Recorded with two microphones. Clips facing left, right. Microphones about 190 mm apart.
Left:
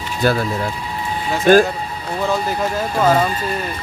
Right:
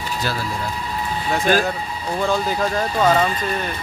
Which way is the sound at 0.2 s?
55° left (ahead or behind).